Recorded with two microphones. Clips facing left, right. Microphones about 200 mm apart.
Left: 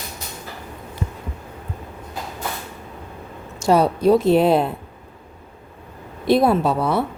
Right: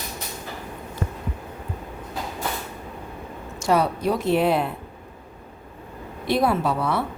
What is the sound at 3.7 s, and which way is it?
Speech, 30° left (ahead or behind).